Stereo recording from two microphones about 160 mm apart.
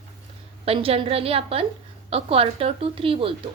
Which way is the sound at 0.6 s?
35° right (ahead or behind).